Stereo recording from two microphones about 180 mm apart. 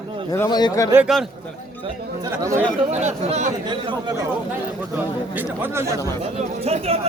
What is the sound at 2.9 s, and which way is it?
Speech, 40° right (ahead or behind).